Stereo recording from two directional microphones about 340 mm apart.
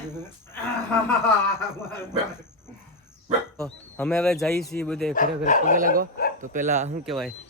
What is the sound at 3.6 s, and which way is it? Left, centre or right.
Speech, centre.